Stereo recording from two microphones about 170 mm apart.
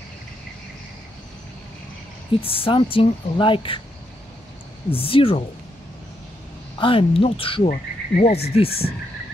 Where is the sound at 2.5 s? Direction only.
30° left (ahead or behind).